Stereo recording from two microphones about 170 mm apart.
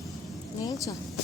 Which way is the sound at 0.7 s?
20° left (ahead or behind).